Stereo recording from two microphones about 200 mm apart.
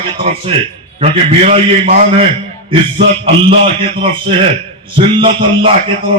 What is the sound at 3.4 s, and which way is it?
Speech, 25° right (ahead or behind).